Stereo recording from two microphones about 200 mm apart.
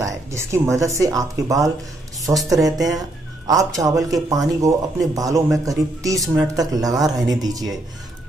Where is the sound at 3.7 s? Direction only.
15° right (ahead or behind).